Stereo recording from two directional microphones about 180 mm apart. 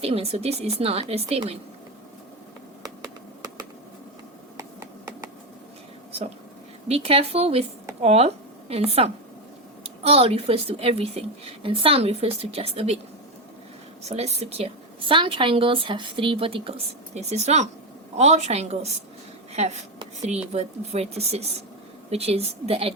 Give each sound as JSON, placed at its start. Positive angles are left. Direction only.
{"t": 0.0, "sound": "speech", "side_deg": -35}
{"t": 2.8, "sound": "a sound", "side_deg": -20}
{"t": 6.8, "sound": "speech", "side_deg": -35}
{"t": 14.1, "sound": "a woman's voice", "side_deg": -35}